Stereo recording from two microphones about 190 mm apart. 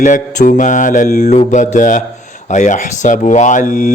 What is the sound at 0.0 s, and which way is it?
Mantra, 40° left (ahead or behind).